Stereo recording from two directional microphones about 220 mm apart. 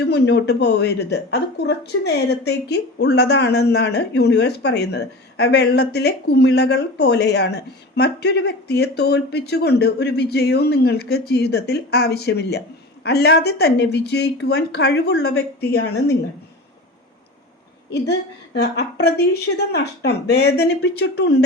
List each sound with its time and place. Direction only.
0.0 s speech: 50° left (ahead or behind)
18.1 s speech: 50° left (ahead or behind)